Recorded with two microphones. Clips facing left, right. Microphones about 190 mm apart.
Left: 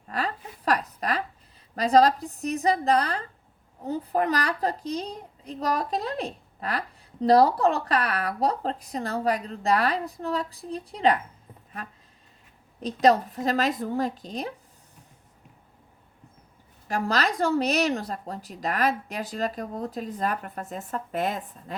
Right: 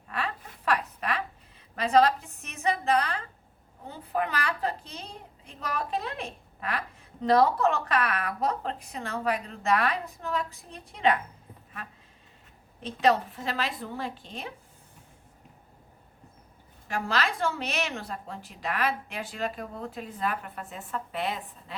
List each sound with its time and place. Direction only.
0.1 s zipper: 35° left (ahead or behind)
1.7 s a woman's voice: 35° left (ahead or behind)
12.8 s a woman's voice: 40° left (ahead or behind)
16.9 s a woman's voice: 40° left (ahead or behind)